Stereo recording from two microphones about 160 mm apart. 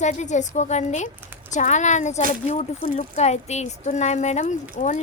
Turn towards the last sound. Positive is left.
turn(degrees=45)  # may be behind; listen again after turning